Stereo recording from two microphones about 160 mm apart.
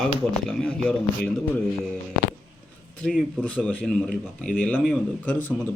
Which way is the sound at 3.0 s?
5° left (ahead or behind).